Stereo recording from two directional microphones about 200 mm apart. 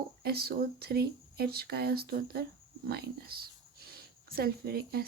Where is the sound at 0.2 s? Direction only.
55° right (ahead or behind).